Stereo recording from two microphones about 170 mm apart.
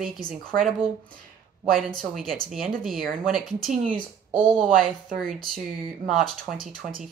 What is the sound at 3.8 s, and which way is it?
Speech, 50° right (ahead or behind).